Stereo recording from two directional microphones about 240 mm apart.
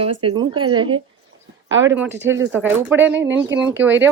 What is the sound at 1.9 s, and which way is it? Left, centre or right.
A woman's voice, centre.